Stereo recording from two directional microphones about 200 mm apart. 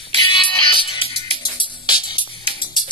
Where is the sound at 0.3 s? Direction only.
25° left (ahead or behind).